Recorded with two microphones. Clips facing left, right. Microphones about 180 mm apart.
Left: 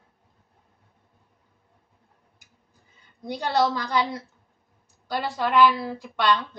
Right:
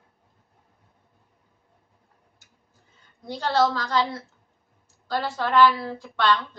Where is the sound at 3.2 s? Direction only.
15° left (ahead or behind).